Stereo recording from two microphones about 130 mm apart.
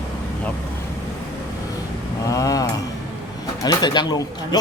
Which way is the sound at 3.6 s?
30° left (ahead or behind).